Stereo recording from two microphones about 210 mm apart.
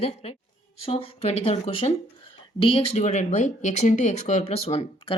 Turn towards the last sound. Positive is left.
turn(degrees=30)  # may be behind; listen again after turning